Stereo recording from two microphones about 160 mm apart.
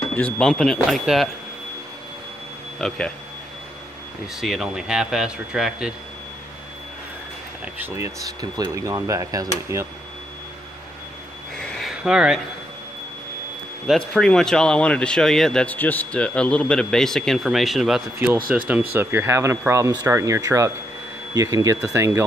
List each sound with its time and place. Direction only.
0.1 s speech: 5° left (ahead or behind)
2.8 s speech: centre (ahead or behind)
4.4 s speech: centre (ahead or behind)
7.6 s speech: 15° right (ahead or behind)
11.8 s a sound: 5° right (ahead or behind)
13.8 s speech: 5° left (ahead or behind); by 22.2 s 15° right (ahead or behind)